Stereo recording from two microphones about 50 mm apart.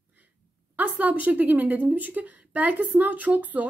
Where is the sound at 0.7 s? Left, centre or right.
Right.